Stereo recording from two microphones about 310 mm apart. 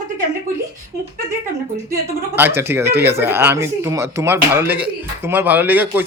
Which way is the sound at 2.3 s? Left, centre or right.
Centre.